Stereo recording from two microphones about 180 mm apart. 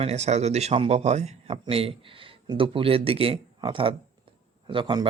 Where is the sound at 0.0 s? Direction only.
35° right (ahead or behind).